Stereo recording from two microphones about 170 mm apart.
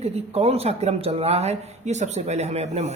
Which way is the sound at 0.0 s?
35° right (ahead or behind).